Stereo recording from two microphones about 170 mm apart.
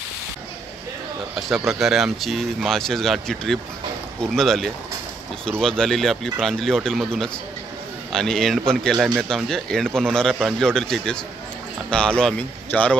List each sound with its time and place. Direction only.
1.7 s speech: centre (ahead or behind)